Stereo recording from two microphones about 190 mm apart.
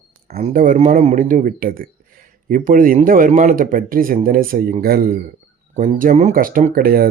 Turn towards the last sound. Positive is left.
turn(degrees=-50)  # may be behind; listen again after turning